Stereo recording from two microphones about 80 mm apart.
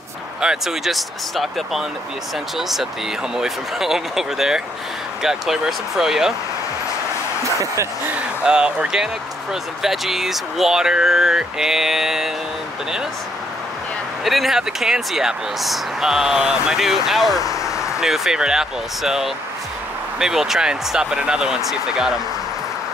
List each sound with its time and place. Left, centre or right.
0.4 s speech: centre
7.4 s speech: right
8.1 s speech: centre
14.2 s speech: centre